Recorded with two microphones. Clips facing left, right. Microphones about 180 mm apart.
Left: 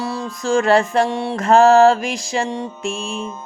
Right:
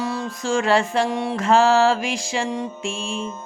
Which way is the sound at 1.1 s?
30° left (ahead or behind).